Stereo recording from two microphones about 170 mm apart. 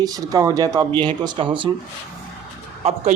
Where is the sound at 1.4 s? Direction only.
30° right (ahead or behind).